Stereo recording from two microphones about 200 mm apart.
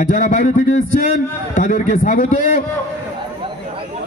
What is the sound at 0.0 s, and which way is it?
A man's voice, 35° left (ahead or behind).